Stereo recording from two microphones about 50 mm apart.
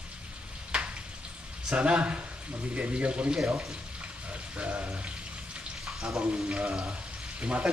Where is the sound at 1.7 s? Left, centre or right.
Right.